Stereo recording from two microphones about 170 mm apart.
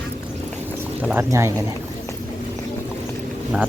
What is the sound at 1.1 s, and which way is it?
Speech, 15° right (ahead or behind).